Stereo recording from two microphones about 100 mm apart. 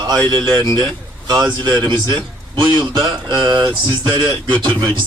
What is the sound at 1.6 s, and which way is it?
A man's voice, 50° right (ahead or behind).